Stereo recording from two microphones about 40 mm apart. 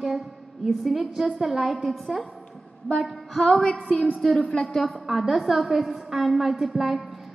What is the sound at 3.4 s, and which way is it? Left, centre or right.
Music, centre.